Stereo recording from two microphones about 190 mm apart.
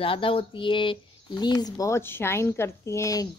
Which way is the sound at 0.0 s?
30° left (ahead or behind).